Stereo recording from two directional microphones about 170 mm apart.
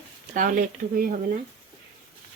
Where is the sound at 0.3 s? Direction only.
55° right (ahead or behind).